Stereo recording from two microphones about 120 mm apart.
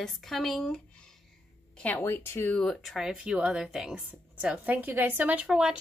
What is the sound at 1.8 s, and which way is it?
Speech, 15° left (ahead or behind).